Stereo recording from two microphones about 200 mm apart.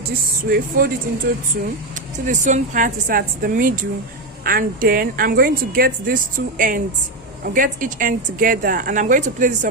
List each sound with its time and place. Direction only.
0.4 s a woman's voice: 50° right (ahead or behind)
2.1 s a woman's voice: 35° right (ahead or behind)